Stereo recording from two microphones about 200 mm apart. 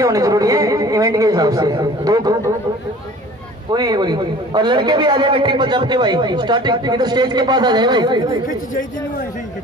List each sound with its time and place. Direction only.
0.0 s speech: 15° right (ahead or behind)
3.7 s a man's voice: 20° right (ahead or behind)